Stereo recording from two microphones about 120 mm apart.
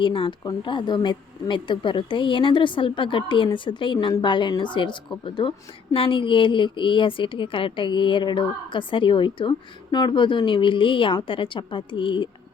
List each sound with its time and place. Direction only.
0.0 s a woman's voice: 45° left (ahead or behind)